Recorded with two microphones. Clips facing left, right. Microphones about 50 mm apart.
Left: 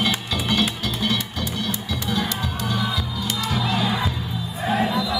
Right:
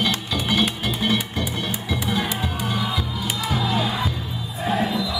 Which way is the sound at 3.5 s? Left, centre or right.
Centre.